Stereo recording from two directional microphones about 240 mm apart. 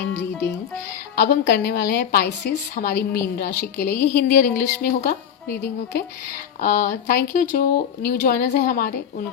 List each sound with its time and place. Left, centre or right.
1.1 s speech: left
6.6 s speech: left